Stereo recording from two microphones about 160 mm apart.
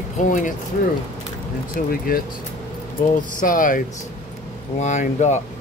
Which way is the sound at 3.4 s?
55° left (ahead or behind).